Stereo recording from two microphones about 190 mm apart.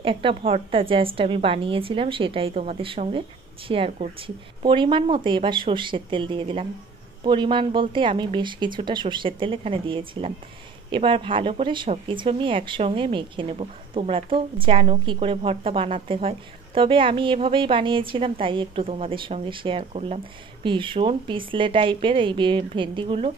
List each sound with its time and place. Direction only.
0.0 s speech: 30° right (ahead or behind)